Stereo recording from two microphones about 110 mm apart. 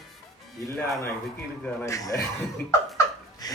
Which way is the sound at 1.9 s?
30° left (ahead or behind).